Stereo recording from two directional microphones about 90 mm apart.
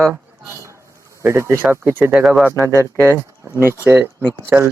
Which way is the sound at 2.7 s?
30° left (ahead or behind).